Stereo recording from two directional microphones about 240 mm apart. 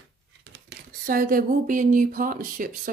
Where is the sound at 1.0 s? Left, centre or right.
Right.